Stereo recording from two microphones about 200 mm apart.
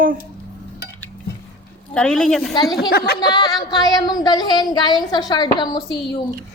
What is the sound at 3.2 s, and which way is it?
A woman's voice, 20° left (ahead or behind).